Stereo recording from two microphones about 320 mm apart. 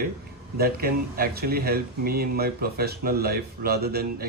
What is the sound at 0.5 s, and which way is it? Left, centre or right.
Speech, right.